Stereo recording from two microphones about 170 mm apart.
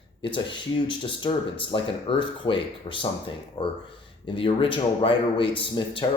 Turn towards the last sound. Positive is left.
turn(degrees=30)  # may be behind; listen again after turning